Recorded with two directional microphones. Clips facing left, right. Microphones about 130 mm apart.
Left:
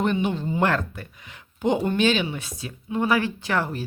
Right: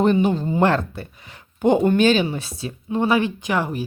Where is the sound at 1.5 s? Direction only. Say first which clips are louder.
Right 6 dB; 50° right (ahead or behind).